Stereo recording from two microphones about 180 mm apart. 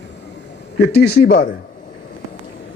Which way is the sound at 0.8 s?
65° left (ahead or behind).